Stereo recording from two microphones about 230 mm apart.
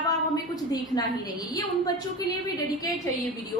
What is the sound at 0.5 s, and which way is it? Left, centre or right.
A woman's voice, centre.